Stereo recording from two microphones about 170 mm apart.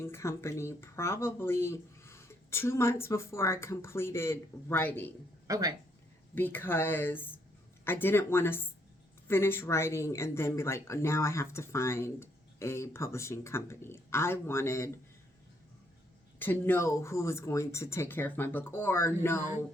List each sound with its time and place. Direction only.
0.0 s speech: 15° left (ahead or behind)
5.5 s speech: 20° right (ahead or behind)
6.3 s speech: 10° left (ahead or behind)
16.4 s speech: 10° left (ahead or behind)